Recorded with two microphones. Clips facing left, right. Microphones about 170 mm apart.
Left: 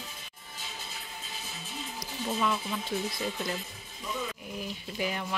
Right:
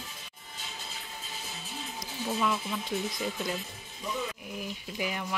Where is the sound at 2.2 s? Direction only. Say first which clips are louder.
Even; 5° right (ahead or behind).